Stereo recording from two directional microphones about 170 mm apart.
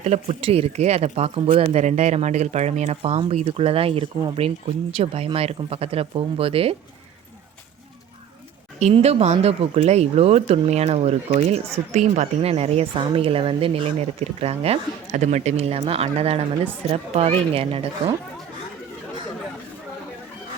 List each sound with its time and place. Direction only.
0.0 s speech: 40° right (ahead or behind)
8.8 s speech: 40° right (ahead or behind)